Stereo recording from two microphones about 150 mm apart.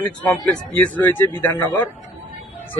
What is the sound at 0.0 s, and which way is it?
Speech, 5° left (ahead or behind).